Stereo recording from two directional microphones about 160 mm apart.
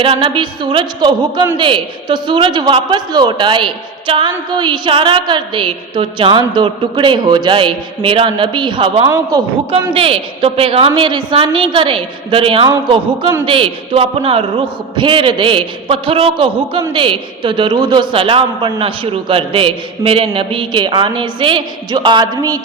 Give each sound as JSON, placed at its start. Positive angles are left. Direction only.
{"t": 0.0, "sound": "a man's voice", "side_deg": -30}
{"t": 9.9, "sound": "a man's voice", "side_deg": -35}